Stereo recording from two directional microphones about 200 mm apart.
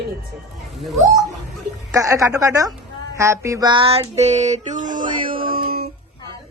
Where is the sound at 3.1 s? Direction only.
15° right (ahead or behind); by 5.9 s 50° right (ahead or behind).